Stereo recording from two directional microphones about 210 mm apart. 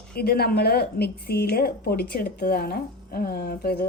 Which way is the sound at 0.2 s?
45° left (ahead or behind).